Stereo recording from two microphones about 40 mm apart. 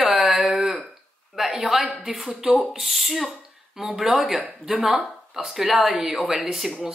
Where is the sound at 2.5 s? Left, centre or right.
Centre.